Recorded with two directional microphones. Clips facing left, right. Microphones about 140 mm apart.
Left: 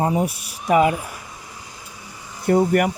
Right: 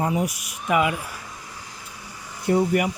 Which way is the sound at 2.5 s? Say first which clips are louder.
Left 3 dB; 55° left (ahead or behind).